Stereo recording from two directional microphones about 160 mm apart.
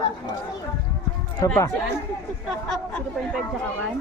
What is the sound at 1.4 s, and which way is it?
Speech, 20° left (ahead or behind).